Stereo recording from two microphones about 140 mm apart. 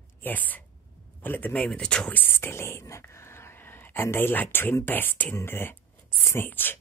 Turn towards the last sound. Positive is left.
turn(degrees=15)  # may be behind; listen again after turning